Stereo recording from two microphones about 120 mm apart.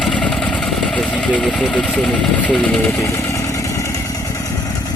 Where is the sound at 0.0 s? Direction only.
5° left (ahead or behind).